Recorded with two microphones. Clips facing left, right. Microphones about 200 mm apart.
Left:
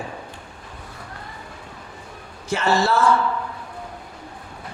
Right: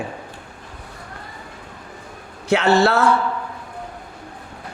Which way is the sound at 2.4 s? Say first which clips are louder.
Right 5 dB; 65° right (ahead or behind).